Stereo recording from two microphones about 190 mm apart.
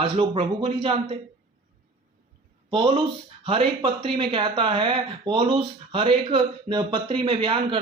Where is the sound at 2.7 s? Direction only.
30° right (ahead or behind).